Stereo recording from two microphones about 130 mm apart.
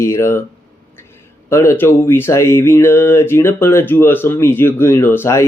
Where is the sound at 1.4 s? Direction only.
20° left (ahead or behind).